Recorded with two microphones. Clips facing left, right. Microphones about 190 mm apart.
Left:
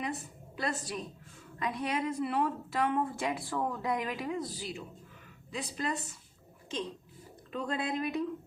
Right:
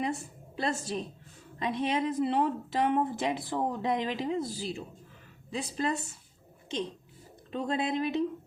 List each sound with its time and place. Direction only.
0.0 s a woman's voice: 30° right (ahead or behind)
7.5 s a woman's voice: 25° right (ahead or behind)